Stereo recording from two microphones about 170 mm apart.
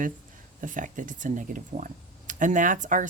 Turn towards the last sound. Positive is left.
turn(degrees=-50)  # may be behind; listen again after turning